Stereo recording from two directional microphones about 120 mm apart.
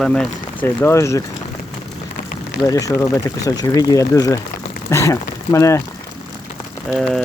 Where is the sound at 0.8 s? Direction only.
25° left (ahead or behind).